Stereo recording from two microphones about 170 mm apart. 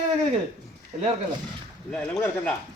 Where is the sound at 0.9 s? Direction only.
40° right (ahead or behind).